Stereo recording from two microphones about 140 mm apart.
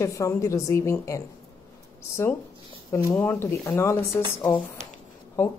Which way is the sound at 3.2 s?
15° left (ahead or behind).